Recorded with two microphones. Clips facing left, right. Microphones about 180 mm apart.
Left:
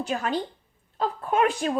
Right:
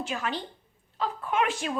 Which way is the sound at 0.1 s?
40° left (ahead or behind).